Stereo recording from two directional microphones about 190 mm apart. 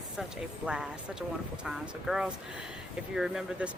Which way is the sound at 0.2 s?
5° right (ahead or behind).